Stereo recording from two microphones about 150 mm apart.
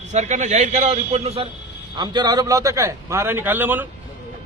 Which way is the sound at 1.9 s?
30° right (ahead or behind).